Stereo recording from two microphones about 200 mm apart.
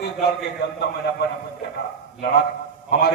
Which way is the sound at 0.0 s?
55° left (ahead or behind).